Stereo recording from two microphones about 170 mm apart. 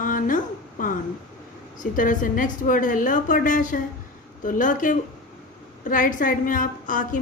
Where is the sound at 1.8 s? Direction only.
50° left (ahead or behind).